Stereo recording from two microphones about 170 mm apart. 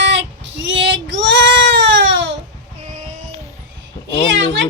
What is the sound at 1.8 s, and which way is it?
Baby cry, 90° right.